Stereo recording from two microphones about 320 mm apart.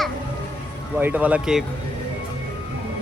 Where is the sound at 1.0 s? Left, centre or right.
Centre.